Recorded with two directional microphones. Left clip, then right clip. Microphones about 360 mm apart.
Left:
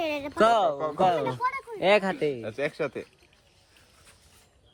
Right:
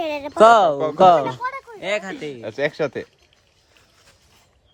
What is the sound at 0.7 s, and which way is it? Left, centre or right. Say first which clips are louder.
Speech: right 8 dB; right.